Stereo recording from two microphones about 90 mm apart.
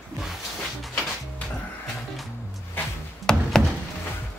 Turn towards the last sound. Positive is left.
turn(degrees=5)  # may be behind; listen again after turning